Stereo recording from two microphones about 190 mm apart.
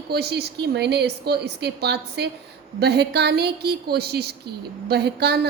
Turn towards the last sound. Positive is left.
turn(degrees=-60)  # may be behind; listen again after turning